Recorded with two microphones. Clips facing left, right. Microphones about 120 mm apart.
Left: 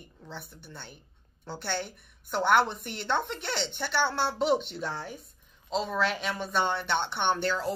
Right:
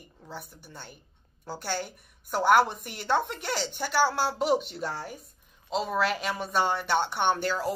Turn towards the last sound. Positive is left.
turn(degrees=-5)  # may be behind; listen again after turning